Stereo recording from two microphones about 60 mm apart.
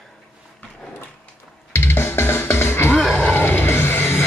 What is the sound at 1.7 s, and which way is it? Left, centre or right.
Music, left.